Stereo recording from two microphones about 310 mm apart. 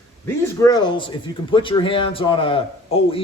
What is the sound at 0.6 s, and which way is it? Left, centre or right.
A man's voice, centre.